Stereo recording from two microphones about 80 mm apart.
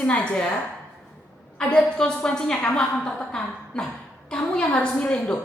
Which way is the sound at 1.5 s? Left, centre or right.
Centre.